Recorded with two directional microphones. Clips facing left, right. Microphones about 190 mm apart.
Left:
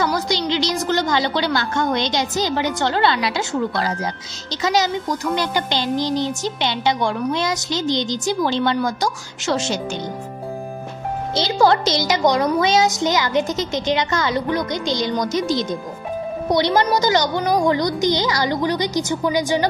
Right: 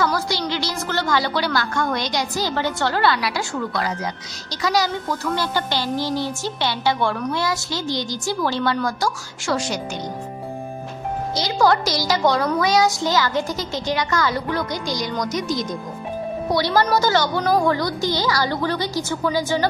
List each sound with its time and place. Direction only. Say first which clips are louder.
0.0 s a woman's voice: left 1 dB; 20° left (ahead or behind)
11.3 s a woman's voice: left 2 dB; 25° left (ahead or behind)